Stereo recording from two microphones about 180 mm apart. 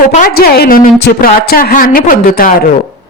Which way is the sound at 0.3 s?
60° left (ahead or behind).